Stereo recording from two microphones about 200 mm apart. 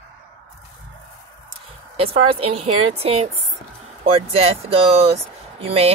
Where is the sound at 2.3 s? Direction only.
30° right (ahead or behind).